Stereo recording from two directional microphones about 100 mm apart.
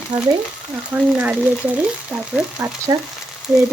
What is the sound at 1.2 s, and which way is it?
Speech, 15° right (ahead or behind).